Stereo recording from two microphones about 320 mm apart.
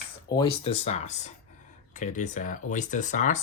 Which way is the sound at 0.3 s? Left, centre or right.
Centre.